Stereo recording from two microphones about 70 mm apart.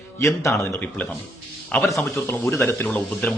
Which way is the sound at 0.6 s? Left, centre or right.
Left.